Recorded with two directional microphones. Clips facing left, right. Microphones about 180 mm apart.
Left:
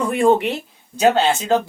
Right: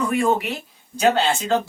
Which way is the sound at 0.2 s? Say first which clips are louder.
Left 8 dB; 30° left (ahead or behind).